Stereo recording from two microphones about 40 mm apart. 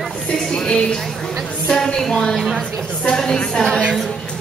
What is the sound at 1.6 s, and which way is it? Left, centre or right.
Music, centre.